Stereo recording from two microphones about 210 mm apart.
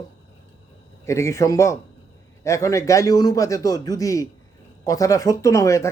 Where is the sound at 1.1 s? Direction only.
15° left (ahead or behind).